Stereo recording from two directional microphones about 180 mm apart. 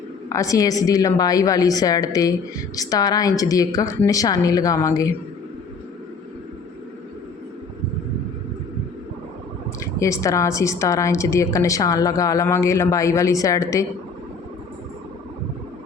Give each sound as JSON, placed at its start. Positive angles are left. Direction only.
{"t": 0.3, "sound": "a woman's voice", "side_deg": 15}
{"t": 9.8, "sound": "a woman's voice", "side_deg": 15}